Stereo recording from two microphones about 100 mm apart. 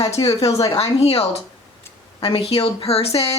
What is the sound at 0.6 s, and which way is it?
Speech, 90° left.